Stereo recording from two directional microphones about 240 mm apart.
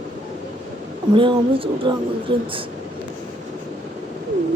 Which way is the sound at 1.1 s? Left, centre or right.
Right.